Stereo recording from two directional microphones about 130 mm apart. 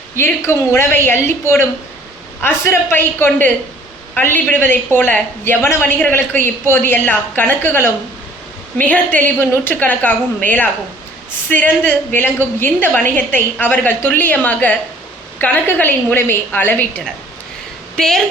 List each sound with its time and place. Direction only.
0.2 s a woman's voice: 20° left (ahead or behind)
17.9 s a woman's voice: 5° left (ahead or behind)